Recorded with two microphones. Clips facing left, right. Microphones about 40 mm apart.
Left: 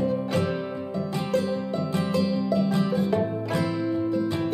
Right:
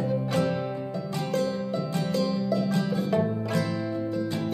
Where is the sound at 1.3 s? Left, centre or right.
Centre.